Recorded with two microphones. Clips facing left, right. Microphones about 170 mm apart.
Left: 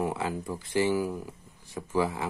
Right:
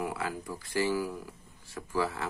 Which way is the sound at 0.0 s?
25° left (ahead or behind).